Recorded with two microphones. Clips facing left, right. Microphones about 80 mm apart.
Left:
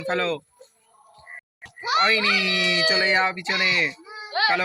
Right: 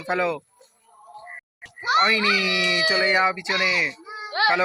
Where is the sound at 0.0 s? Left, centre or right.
Centre.